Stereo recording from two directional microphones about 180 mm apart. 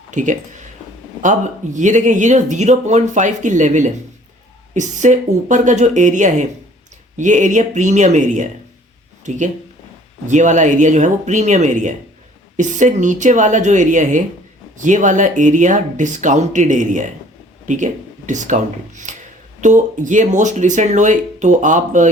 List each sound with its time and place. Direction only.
0.1 s speech: 45° right (ahead or behind)